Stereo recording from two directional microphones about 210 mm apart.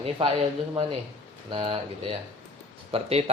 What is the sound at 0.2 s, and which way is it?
Speech, 25° right (ahead or behind).